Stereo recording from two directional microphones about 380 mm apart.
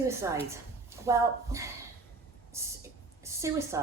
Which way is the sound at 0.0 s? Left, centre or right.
Centre.